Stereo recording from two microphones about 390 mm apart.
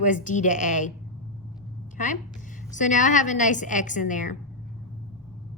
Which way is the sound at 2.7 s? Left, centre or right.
Centre.